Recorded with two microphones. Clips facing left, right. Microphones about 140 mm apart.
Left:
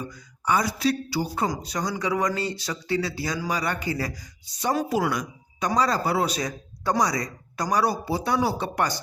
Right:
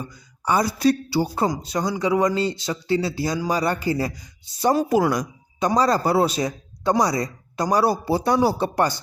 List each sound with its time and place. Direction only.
0.4 s speech: 35° right (ahead or behind)